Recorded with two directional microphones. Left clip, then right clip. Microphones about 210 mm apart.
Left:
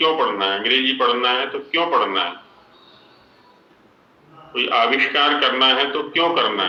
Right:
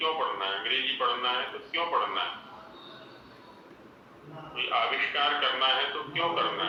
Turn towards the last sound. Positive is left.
turn(degrees=55)  # may be behind; listen again after turning